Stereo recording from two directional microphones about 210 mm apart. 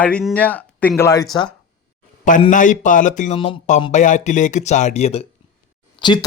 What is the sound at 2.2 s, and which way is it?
Speech, 35° left (ahead or behind).